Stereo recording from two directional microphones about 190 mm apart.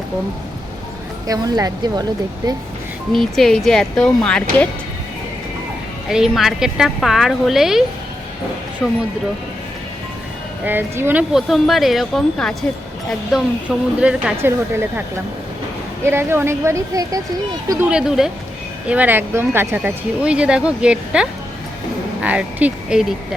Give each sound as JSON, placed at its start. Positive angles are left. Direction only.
{"t": 1.3, "sound": "speech", "side_deg": -20}
{"t": 3.1, "sound": "speech", "side_deg": 0}
{"t": 6.1, "sound": "speech", "side_deg": 0}
{"t": 10.6, "sound": "speech", "side_deg": -10}
{"t": 16.0, "sound": "speech", "side_deg": -10}